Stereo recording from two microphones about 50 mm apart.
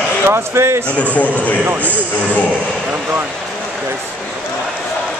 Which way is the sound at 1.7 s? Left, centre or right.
Right.